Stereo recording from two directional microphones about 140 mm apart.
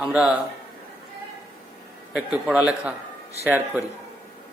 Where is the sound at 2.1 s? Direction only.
5° right (ahead or behind).